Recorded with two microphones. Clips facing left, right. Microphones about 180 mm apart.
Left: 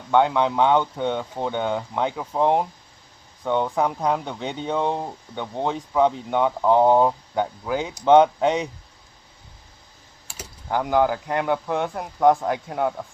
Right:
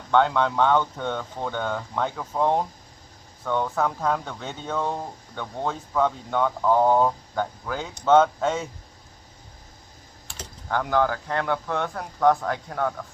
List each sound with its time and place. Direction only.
0.1 s speech: 10° left (ahead or behind)
10.2 s speech: 10° left (ahead or behind)